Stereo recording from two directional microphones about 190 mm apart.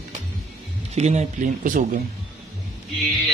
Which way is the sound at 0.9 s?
35° right (ahead or behind).